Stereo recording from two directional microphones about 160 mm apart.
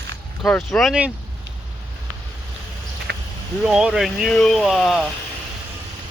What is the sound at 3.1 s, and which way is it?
Vehicle, 90° right.